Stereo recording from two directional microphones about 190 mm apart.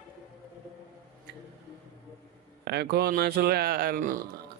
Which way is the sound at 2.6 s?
60° right (ahead or behind).